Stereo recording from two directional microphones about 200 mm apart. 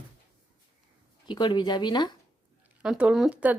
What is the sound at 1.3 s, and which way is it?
Speech, 20° left (ahead or behind).